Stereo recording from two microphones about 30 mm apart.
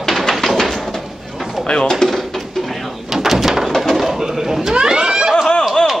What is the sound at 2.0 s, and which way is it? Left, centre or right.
Speech, left.